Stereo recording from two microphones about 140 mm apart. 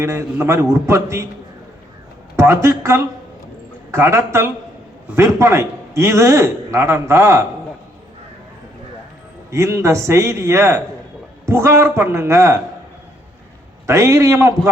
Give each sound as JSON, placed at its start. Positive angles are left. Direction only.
{"t": 0.0, "sound": "a man's voice", "side_deg": -20}
{"t": 2.3, "sound": "a man's voice", "side_deg": -20}
{"t": 9.5, "sound": "a man's voice", "side_deg": -20}
{"t": 13.8, "sound": "a man's voice", "side_deg": -20}